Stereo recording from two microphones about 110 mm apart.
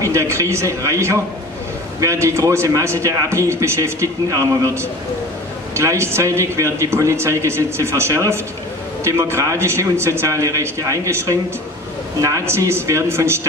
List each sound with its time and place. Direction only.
0.0 s speech: 25° right (ahead or behind)